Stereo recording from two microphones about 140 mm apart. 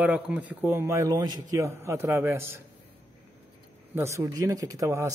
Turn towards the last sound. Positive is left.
turn(degrees=-20)  # may be behind; listen again after turning